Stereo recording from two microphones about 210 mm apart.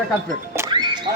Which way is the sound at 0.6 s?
20° right (ahead or behind).